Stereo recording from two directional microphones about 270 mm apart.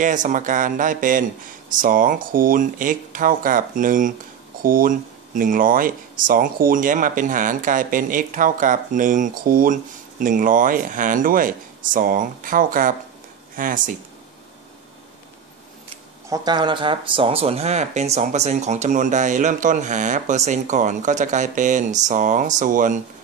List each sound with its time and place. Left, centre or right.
0.0 s speech: right
16.3 s speech: centre